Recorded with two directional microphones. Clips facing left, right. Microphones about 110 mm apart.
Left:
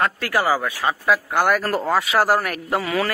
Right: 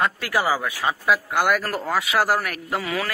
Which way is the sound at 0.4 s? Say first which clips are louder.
Left 2 dB; 20° left (ahead or behind).